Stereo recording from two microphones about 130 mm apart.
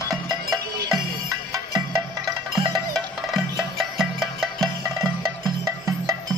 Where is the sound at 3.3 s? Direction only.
Centre (ahead or behind).